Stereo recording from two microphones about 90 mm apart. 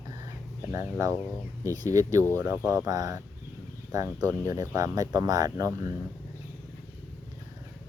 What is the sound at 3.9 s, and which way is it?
Speech, 35° right (ahead or behind).